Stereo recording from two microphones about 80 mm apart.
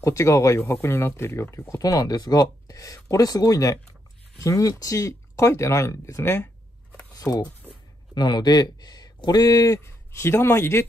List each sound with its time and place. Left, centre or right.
0.0 s speech: left
6.3 s a sound: left
7.2 s speech: left
8.1 s speech: left
10.2 s speech: left